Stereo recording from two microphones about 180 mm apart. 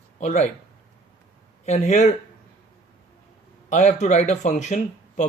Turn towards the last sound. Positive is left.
turn(degrees=40)  # may be behind; listen again after turning